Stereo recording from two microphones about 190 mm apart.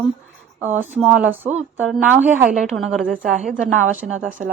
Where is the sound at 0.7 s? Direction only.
10° right (ahead or behind).